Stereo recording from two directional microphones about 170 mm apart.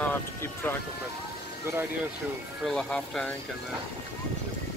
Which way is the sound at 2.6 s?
5° left (ahead or behind).